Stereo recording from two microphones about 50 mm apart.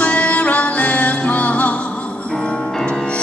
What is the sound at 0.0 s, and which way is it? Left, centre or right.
Music, left.